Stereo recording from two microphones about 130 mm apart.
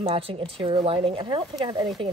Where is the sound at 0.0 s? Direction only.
45° right (ahead or behind).